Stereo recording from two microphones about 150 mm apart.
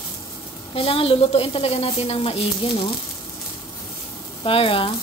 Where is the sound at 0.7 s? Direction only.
40° left (ahead or behind).